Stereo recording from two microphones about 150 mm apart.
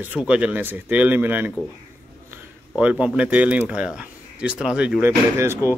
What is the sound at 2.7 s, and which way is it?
Speech, 5° right (ahead or behind).